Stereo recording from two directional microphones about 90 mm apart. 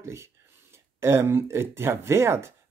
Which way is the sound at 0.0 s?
30° right (ahead or behind).